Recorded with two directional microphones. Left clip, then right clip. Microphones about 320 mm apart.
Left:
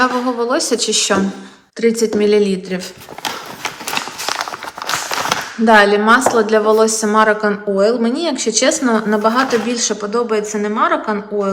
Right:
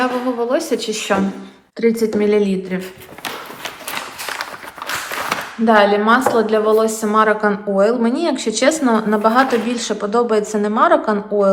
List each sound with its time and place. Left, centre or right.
0.0 s a woman's voice: centre
5.3 s speech: centre